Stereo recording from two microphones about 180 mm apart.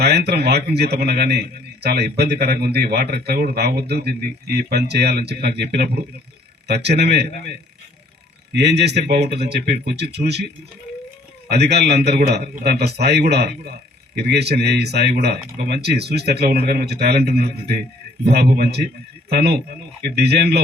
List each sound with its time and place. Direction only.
0.0 s a man's voice: 65° right (ahead or behind)
8.5 s speech: 70° right (ahead or behind)
11.4 s a man's voice: 65° right (ahead or behind)